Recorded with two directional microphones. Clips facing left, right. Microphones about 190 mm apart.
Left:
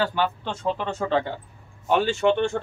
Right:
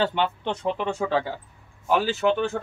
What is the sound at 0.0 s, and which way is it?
Speech, 20° right (ahead or behind).